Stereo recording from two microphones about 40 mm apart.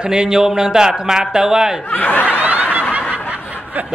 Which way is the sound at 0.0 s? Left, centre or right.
Centre.